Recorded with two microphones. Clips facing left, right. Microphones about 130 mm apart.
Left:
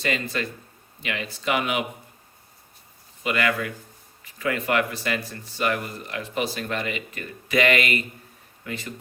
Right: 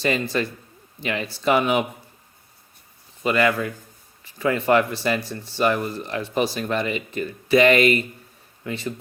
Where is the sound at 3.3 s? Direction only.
30° right (ahead or behind).